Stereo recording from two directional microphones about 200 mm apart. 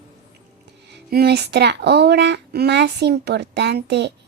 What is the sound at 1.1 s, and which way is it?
Speech, 55° right (ahead or behind).